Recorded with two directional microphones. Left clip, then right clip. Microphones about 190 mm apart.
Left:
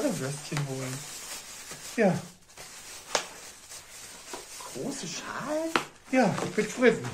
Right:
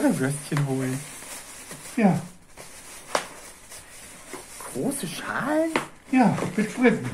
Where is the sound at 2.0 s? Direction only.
50° left (ahead or behind).